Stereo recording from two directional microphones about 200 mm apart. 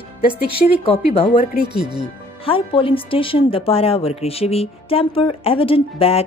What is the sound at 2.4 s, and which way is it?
A woman's voice, 25° left (ahead or behind).